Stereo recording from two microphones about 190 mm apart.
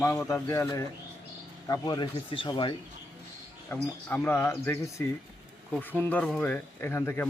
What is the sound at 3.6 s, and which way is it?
Speech, 10° left (ahead or behind).